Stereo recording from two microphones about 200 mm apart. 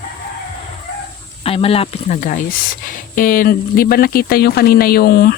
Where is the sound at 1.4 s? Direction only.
30° left (ahead or behind).